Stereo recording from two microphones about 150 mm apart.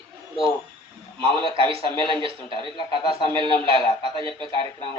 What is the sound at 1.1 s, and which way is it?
A man's voice, 35° right (ahead or behind).